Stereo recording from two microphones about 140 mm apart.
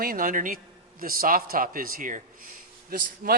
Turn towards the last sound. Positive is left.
turn(degrees=-90)